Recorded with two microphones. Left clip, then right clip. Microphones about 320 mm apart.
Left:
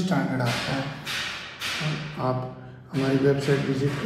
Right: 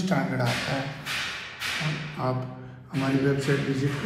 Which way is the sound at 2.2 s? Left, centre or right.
Centre.